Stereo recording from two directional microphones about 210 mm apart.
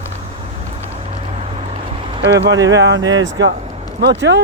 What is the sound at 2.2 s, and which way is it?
Speech, 55° right (ahead or behind).